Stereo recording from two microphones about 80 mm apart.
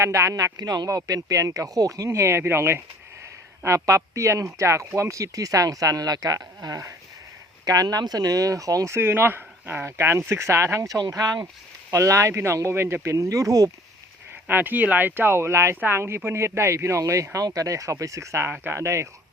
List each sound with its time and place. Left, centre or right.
0.0 s speech: right
2.0 s speech: right
9.0 s speech: right
11.1 s speech: right
11.9 s speech: right
14.4 s speech: right